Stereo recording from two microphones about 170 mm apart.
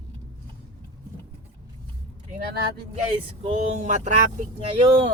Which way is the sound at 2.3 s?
60° right (ahead or behind).